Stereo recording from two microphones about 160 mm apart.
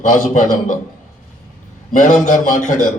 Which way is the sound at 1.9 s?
55° left (ahead or behind).